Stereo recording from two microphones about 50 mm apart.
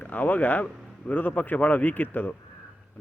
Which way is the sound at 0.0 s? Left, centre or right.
Left.